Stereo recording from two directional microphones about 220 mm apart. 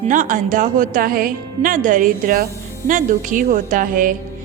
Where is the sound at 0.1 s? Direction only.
35° right (ahead or behind).